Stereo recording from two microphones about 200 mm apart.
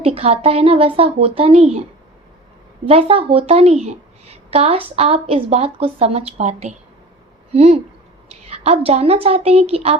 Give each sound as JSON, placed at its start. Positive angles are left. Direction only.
{"t": 0.0, "sound": "speech", "side_deg": -30}
{"t": 2.8, "sound": "a woman's voice", "side_deg": -30}